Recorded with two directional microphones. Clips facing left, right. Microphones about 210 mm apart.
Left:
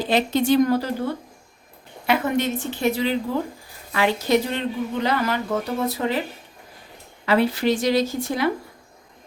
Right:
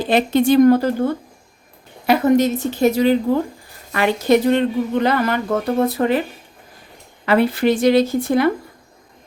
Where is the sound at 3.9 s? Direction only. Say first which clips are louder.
Right 4 dB; 55° right (ahead or behind).